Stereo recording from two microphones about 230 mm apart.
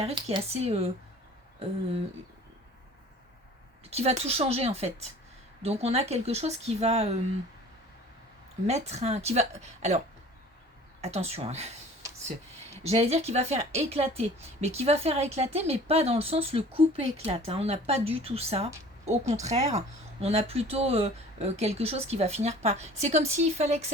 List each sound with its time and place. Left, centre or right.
0.0 s a woman's voice: right
3.8 s a woman's voice: right
8.6 s a woman's voice: right
11.0 s a woman's voice: right
12.7 s a woman's voice: right